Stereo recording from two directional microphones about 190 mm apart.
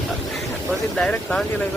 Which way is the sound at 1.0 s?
5° left (ahead or behind).